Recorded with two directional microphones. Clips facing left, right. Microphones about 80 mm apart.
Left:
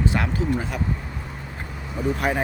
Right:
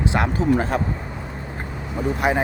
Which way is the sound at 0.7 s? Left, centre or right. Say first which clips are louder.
Right 6 dB; right.